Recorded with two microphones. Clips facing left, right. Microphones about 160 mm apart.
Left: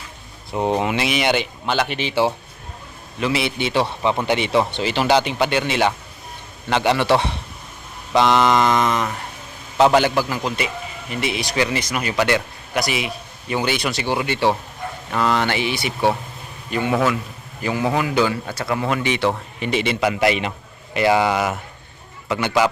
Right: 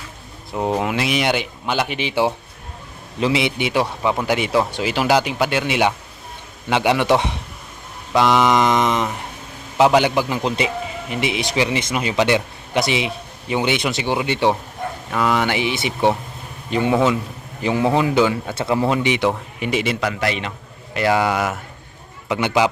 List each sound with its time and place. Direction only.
0.5 s a man's voice: centre (ahead or behind); by 9.1 s 20° right (ahead or behind)
9.7 s a man's voice: 10° right (ahead or behind)
20.0 s a man's voice: 10° left (ahead or behind)
20.9 s speech: 5° left (ahead or behind)
22.3 s a man's voice: 15° right (ahead or behind)